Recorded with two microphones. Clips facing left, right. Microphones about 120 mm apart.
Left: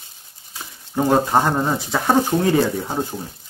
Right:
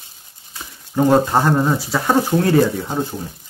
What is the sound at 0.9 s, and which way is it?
Speech, 15° left (ahead or behind).